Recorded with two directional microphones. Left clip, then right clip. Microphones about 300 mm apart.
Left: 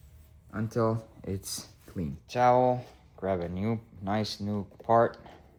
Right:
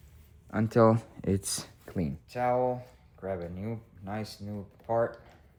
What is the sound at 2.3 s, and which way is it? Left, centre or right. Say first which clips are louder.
Speech: left 5 dB; left.